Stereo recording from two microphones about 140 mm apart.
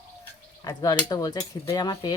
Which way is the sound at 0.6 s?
25° left (ahead or behind).